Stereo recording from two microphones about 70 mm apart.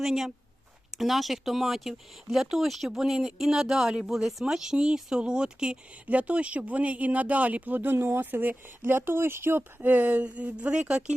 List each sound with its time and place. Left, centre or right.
0.0 s speech: centre; by 9.6 s right
9.8 s speech: right